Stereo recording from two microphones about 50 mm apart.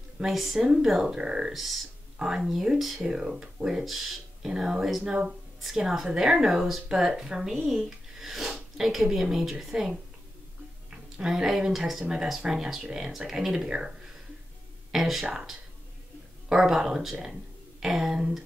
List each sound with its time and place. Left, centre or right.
0.2 s speech: centre
1.5 s speech: centre
2.1 s speech: centre
3.8 s speech: centre
6.1 s speech: centre
11.2 s speech: centre
16.4 s speech: centre